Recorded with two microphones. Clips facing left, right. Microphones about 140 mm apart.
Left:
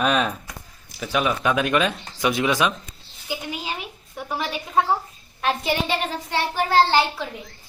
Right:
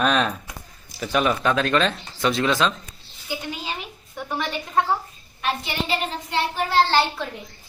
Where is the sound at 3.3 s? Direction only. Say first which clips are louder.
Left 1 dB; 10° left (ahead or behind).